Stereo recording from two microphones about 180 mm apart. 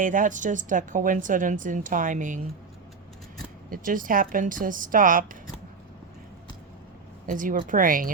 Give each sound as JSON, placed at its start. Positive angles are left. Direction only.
{"t": 0.0, "sound": "a woman's voice", "side_deg": -45}
{"t": 3.7, "sound": "a woman's voice", "side_deg": -50}
{"t": 7.3, "sound": "a woman's voice", "side_deg": -45}